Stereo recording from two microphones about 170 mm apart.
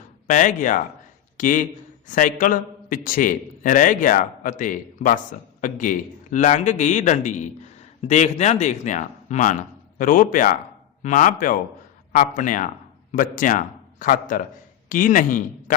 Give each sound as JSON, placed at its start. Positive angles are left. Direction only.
{"t": 0.3, "sound": "a man's voice", "side_deg": 50}